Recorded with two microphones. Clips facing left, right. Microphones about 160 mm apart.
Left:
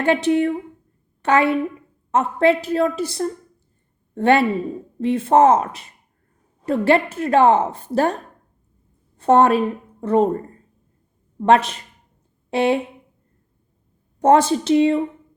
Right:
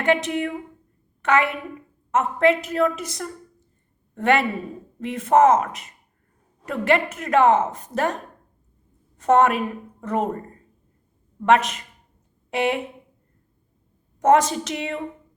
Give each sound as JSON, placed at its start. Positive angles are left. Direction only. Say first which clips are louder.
{"t": 0.0, "sound": "a woman's voice", "louder": "left 4 dB", "side_deg": 30}
{"t": 9.1, "sound": "a woman's voice", "louder": "left 3 dB", "side_deg": 30}
{"t": 11.4, "sound": "a woman's voice", "louder": "left 3 dB", "side_deg": 30}
{"t": 14.2, "sound": "a woman's voice", "louder": "left 3 dB", "side_deg": 30}